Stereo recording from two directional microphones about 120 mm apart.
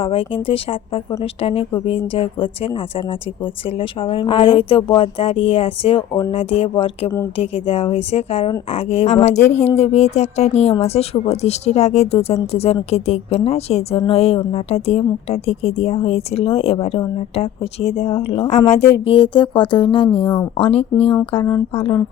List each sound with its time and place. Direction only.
0.0 s a woman's voice: 50° left (ahead or behind)
9.2 s a woman's voice: 70° left (ahead or behind); by 20.8 s 55° left (ahead or behind)
21.4 s speech: 30° left (ahead or behind)